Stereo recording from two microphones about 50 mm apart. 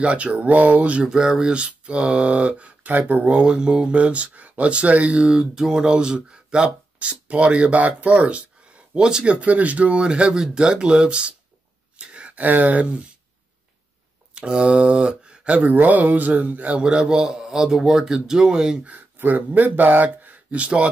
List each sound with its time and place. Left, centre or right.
0.0 s speech: right
1.0 s a man's voice: centre; by 3.3 s right
3.3 s speech: centre
14.3 s speech: centre
15.7 s mantra: right
16.8 s a man's voice: centre
18.9 s speech: right